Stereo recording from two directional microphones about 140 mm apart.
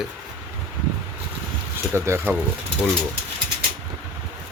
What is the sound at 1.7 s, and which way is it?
Speech, 15° right (ahead or behind).